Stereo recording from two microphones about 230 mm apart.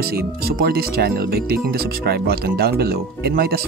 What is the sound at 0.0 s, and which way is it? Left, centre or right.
Speech, right.